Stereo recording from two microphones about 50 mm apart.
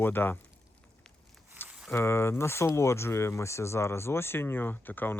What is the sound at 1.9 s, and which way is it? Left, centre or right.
Speech, left.